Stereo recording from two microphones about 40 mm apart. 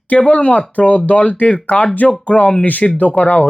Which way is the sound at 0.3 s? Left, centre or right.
Left.